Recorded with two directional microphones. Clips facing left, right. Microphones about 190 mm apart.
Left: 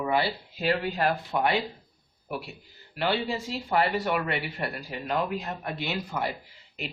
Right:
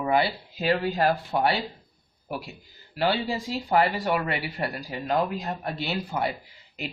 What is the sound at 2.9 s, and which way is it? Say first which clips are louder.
Speech: right 2 dB; 40° right (ahead or behind).